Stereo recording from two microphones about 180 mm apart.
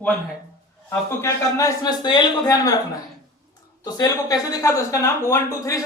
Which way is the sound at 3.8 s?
20° left (ahead or behind).